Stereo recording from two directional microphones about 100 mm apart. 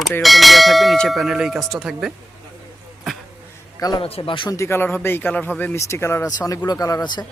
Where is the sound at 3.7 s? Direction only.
40° left (ahead or behind).